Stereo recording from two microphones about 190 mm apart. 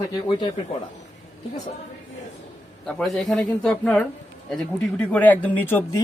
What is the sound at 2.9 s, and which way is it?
Speech, centre (ahead or behind).